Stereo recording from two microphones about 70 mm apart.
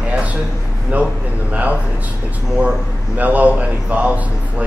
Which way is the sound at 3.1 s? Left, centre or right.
Right.